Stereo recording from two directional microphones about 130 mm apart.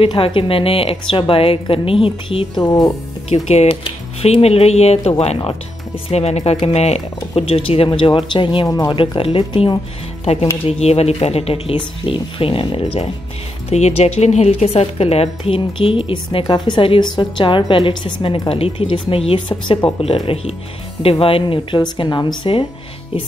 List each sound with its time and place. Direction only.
0.0 s a woman's voice: 45° left (ahead or behind)
3.3 s a woman's voice: 50° left (ahead or behind)
8.6 s speech: 30° left (ahead or behind)
8.9 s speech: 40° left (ahead or behind)
10.2 s a woman's voice: 50° left (ahead or behind)
13.7 s a woman's voice: 55° left (ahead or behind); by 22.7 s 40° left (ahead or behind)